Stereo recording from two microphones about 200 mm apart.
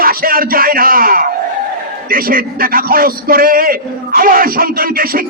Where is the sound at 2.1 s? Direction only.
45° right (ahead or behind).